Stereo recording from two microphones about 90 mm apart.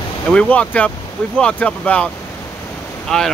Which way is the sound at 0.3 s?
15° left (ahead or behind).